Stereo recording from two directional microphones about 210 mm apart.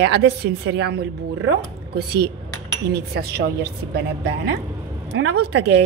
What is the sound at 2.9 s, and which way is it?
Speech, 50° right (ahead or behind).